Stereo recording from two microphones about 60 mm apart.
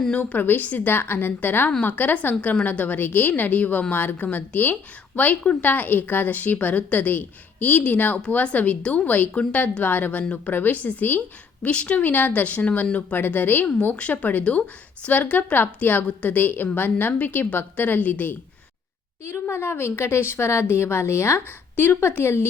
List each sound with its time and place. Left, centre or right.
0.2 s a woman's voice: left
19.2 s speech: left